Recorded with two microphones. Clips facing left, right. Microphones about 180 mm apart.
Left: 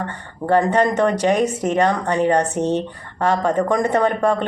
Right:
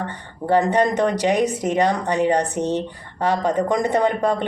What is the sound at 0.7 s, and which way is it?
Speech, 15° right (ahead or behind).